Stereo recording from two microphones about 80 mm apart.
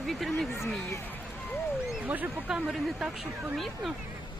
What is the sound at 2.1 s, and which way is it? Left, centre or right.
Speech, centre.